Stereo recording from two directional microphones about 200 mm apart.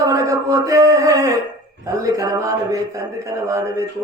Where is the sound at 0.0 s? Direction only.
15° right (ahead or behind).